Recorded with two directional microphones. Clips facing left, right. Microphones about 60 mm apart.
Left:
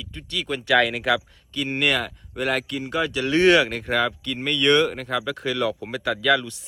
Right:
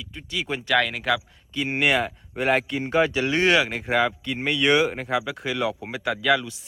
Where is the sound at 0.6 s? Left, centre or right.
Centre.